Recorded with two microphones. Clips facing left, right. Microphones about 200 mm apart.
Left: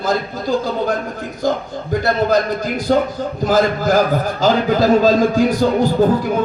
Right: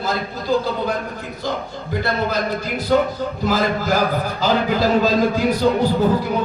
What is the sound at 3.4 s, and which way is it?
A man's voice, 45° left (ahead or behind).